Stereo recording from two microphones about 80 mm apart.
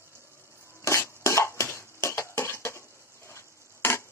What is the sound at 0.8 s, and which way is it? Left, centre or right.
Dishes, left.